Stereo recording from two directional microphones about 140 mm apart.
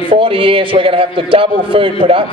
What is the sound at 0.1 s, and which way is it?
Speech, 40° right (ahead or behind).